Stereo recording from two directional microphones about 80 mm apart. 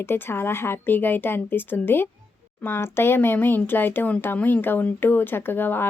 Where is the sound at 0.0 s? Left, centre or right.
Left.